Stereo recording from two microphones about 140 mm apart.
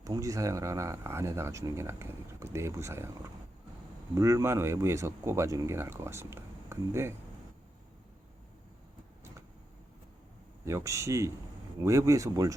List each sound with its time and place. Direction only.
0.0 s speech: 25° right (ahead or behind)
4.1 s speech: 25° right (ahead or behind)
10.7 s speech: 20° right (ahead or behind)